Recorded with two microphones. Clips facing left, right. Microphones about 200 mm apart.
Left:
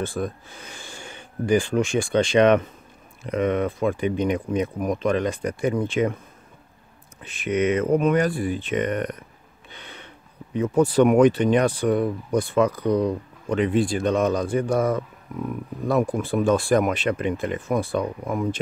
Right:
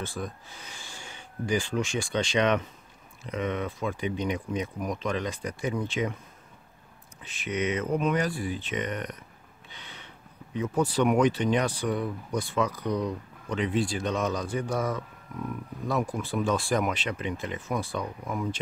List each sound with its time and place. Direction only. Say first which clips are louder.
0.0 s speech: left 8 dB; 55° left (ahead or behind)
7.2 s speech: left 8 dB; 55° left (ahead or behind)
9.7 s a sound: left 5 dB; 55° left (ahead or behind)
10.5 s speech: left 7 dB; 55° left (ahead or behind)